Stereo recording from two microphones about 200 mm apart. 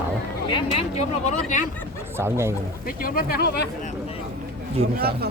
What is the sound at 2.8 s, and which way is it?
Speech, 45° left (ahead or behind).